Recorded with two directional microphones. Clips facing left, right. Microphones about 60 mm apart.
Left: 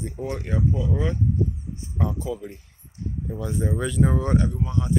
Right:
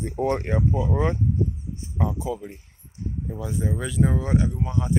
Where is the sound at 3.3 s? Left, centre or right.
Centre.